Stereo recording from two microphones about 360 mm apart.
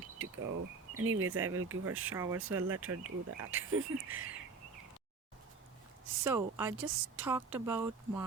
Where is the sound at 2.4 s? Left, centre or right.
Right.